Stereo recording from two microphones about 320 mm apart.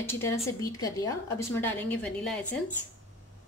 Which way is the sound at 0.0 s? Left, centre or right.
Centre.